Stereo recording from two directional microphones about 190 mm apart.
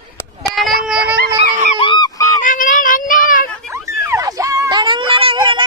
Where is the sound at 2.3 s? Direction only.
40° left (ahead or behind).